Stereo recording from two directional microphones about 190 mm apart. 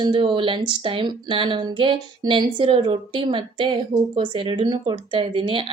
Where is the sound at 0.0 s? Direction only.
25° right (ahead or behind).